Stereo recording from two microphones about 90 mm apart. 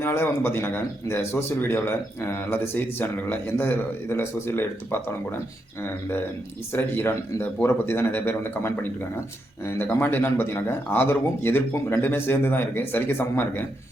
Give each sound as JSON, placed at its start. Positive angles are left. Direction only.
{"t": 0.0, "sound": "a man's voice", "side_deg": 25}
{"t": 6.7, "sound": "a man's voice", "side_deg": 25}